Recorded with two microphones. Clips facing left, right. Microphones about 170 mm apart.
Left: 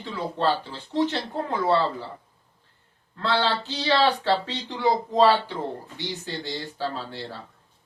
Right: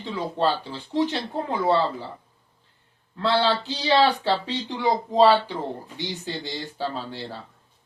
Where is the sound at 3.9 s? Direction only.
15° right (ahead or behind).